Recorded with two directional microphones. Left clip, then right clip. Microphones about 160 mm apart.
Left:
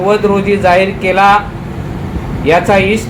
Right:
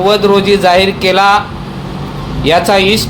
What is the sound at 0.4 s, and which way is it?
Speech, 45° right (ahead or behind).